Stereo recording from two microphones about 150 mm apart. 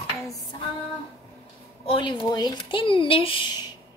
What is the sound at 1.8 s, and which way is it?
Speech, 35° left (ahead or behind).